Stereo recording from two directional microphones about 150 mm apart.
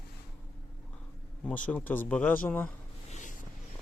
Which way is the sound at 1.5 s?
10° left (ahead or behind).